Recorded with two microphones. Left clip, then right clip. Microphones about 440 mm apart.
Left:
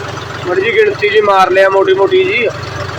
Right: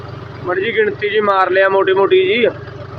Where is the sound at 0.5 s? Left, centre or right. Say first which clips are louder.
Left 5 dB; right.